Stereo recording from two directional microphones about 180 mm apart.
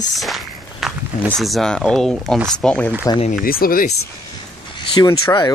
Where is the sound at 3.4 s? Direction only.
55° left (ahead or behind).